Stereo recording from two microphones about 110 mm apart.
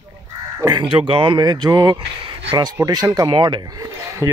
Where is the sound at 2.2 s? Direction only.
45° right (ahead or behind).